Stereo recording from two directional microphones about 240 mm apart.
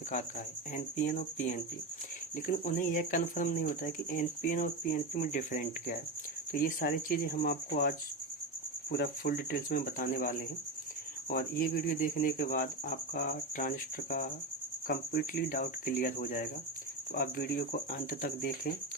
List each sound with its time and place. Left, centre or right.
0.7 s speech: left